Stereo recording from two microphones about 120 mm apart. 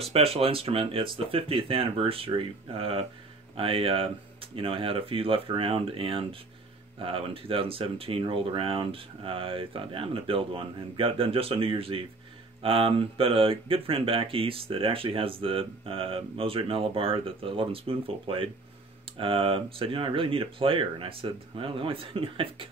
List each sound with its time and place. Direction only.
0.0 s speech: 55° right (ahead or behind)